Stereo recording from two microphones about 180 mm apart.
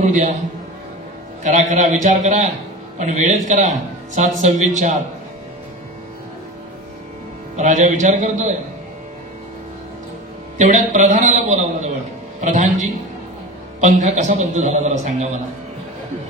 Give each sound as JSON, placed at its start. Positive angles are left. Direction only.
{"t": 0.0, "sound": "a man's voice", "side_deg": -45}
{"t": 1.4, "sound": "a man's voice", "side_deg": -40}
{"t": 7.5, "sound": "a man's voice", "side_deg": -40}
{"t": 10.6, "sound": "a man's voice", "side_deg": -40}